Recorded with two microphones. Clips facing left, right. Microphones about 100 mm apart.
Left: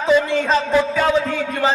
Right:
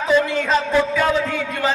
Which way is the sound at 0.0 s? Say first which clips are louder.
Left 2 dB; 30° left (ahead or behind).